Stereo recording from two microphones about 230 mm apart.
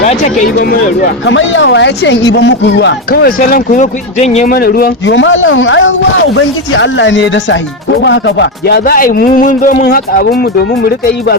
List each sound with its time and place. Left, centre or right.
0.0 s speech: left
1.2 s speech: left